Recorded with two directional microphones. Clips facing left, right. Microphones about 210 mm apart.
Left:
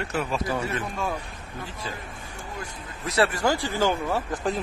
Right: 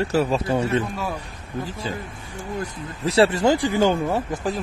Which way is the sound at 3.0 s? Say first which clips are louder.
Right 6 dB; 25° right (ahead or behind).